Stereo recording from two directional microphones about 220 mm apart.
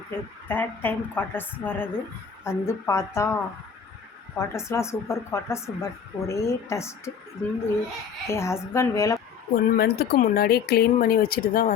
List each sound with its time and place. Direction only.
0.1 s speech: 10° left (ahead or behind)
9.6 s speech: 45° left (ahead or behind)